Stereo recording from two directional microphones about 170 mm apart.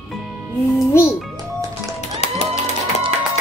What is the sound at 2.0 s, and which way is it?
Music, 40° left (ahead or behind).